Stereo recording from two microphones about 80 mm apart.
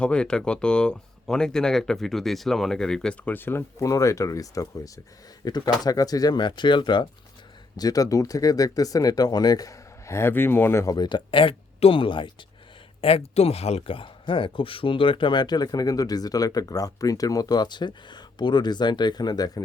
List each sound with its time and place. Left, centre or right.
0.0 s speech: centre
3.2 s speech: left
3.8 s speech: left
5.5 s speech: left
7.8 s speech: left
10.8 s speech: left
13.9 s speech: left